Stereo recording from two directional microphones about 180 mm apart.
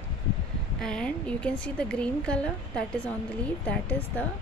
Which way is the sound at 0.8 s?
5° left (ahead or behind).